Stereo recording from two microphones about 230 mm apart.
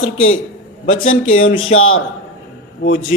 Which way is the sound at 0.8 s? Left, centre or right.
Left.